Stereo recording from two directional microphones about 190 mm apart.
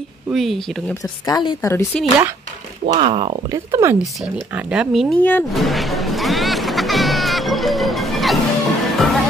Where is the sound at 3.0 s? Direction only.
30° right (ahead or behind).